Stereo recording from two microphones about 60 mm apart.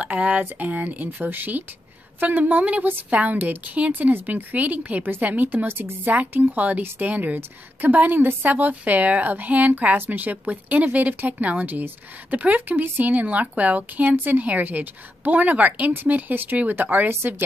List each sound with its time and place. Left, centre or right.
0.0 s a woman's voice: right